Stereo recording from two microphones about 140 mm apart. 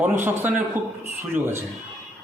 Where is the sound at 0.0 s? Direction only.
10° right (ahead or behind).